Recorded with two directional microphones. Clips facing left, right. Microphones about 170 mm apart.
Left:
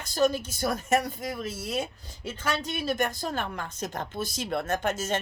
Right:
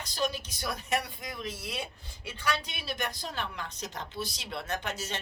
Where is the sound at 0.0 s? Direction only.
45° left (ahead or behind).